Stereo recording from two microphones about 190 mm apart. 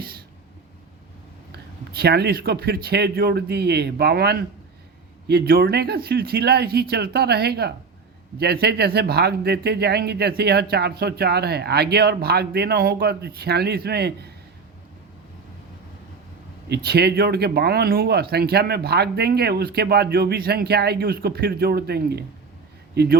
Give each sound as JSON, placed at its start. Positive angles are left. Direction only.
{"t": 1.5, "sound": "speech", "side_deg": -60}
{"t": 16.6, "sound": "speech", "side_deg": -60}